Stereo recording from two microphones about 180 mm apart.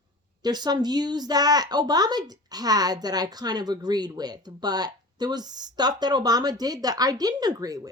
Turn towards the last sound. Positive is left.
turn(degrees=-20)  # may be behind; listen again after turning